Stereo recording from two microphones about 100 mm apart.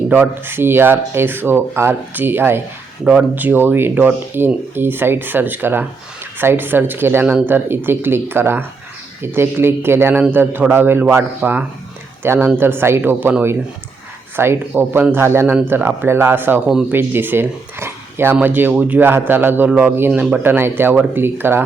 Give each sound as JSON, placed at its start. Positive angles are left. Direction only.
{"t": 0.1, "sound": "speech", "side_deg": -20}
{"t": 14.3, "sound": "speech", "side_deg": -25}